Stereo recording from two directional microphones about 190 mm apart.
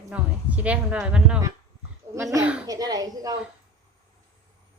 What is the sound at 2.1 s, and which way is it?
A woman's voice, 15° right (ahead or behind).